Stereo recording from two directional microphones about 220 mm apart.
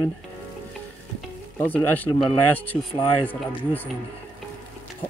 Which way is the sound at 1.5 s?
10° left (ahead or behind).